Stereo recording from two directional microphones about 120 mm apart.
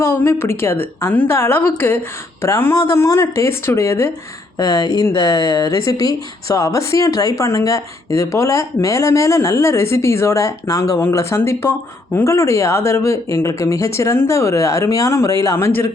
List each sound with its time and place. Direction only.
0.0 s speech: 20° left (ahead or behind)